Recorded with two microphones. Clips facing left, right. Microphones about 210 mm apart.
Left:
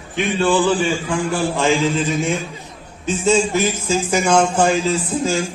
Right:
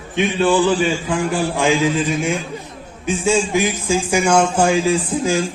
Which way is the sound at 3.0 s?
10° right (ahead or behind).